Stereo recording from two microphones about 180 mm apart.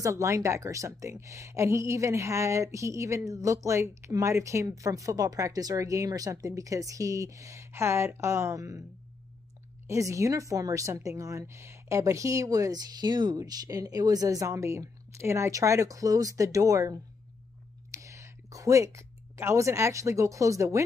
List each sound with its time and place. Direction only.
0.0 s a woman's voice: 15° right (ahead or behind)
9.8 s a woman's voice: 15° right (ahead or behind)